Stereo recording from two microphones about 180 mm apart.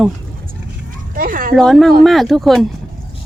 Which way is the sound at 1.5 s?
Centre (ahead or behind).